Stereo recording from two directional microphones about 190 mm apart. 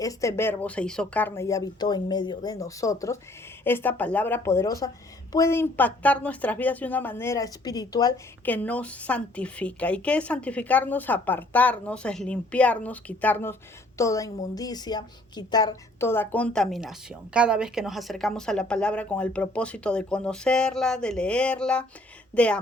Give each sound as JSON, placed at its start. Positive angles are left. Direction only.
{"t": 0.0, "sound": "a woman's voice", "side_deg": 15}